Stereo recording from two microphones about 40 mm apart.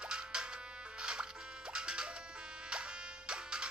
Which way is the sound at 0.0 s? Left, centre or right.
Centre.